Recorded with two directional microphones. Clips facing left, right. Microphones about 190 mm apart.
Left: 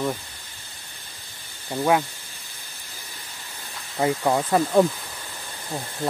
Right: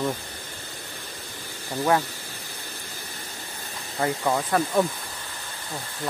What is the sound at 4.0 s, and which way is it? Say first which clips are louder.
Speech: left 3 dB; 20° left (ahead or behind).